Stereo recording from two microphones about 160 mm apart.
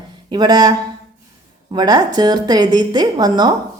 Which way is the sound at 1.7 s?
25° right (ahead or behind).